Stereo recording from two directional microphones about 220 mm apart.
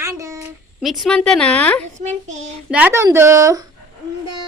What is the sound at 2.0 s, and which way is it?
Child singing, 35° right (ahead or behind).